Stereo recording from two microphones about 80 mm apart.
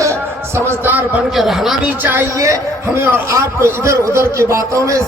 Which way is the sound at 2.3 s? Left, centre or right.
Right.